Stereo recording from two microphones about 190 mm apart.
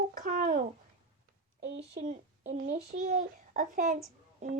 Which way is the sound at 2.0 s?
40° right (ahead or behind).